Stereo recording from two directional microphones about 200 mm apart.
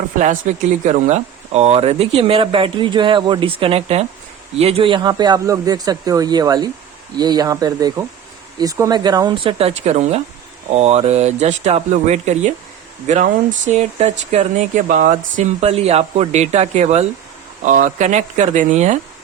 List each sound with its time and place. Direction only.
0.2 s speech: 40° right (ahead or behind)